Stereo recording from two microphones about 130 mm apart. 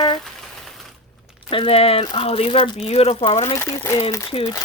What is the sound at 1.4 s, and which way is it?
Speech, 45° left (ahead or behind).